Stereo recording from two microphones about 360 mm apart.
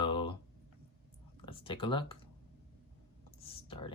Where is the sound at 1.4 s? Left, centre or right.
Centre.